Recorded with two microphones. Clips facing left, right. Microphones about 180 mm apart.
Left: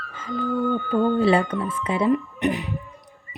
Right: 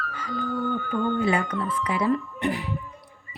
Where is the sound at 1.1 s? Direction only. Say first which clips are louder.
Left 5 dB; 30° left (ahead or behind).